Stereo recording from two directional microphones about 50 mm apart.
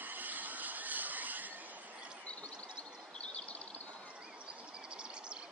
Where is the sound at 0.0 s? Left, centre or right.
Right.